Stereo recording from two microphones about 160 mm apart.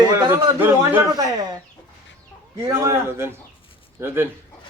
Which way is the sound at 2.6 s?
20° right (ahead or behind).